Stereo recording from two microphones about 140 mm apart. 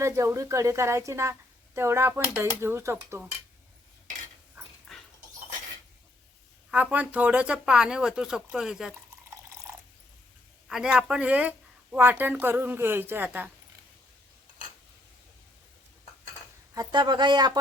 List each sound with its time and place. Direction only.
0.0 s a woman's voice: 20° right (ahead or behind)
4.9 s dog: centre (ahead or behind)
6.7 s speech: 10° right (ahead or behind)
10.7 s speech: 5° right (ahead or behind)
16.7 s speech: 30° right (ahead or behind)